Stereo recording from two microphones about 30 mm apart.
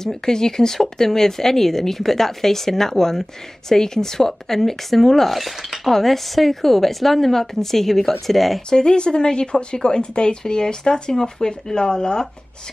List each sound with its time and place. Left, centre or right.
0.0 s speech: centre
8.6 s speech: left